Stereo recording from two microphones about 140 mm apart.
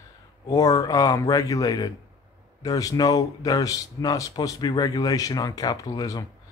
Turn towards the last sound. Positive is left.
turn(degrees=25)  # may be behind; listen again after turning